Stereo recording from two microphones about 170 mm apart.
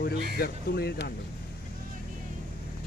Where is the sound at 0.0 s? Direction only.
65° left (ahead or behind).